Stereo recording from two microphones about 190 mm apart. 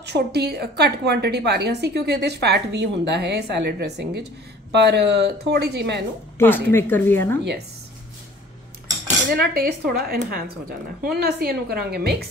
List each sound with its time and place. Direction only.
0.0 s a woman's voice: 60° right (ahead or behind)
6.3 s a woman's voice: 10° left (ahead or behind)
9.3 s a woman's voice: 55° right (ahead or behind)